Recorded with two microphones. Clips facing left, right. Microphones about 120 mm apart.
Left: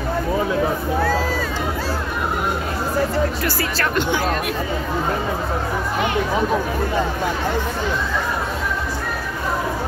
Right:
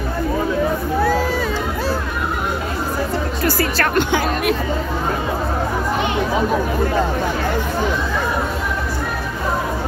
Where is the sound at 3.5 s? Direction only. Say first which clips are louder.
Right 4 dB; 55° right (ahead or behind); by 4.6 s 75° right (ahead or behind).